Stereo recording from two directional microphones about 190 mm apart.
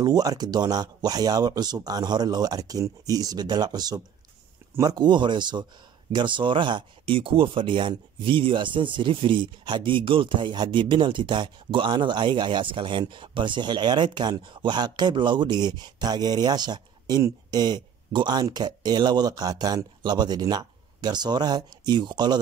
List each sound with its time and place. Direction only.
0.0 s speech: 20° right (ahead or behind)